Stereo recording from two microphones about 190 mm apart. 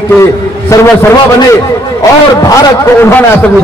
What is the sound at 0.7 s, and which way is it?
Speech, 15° left (ahead or behind).